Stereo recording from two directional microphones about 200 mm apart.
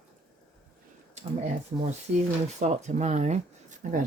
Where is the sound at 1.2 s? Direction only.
35° right (ahead or behind).